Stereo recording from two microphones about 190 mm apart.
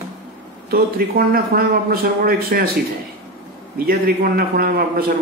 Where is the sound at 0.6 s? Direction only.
50° right (ahead or behind).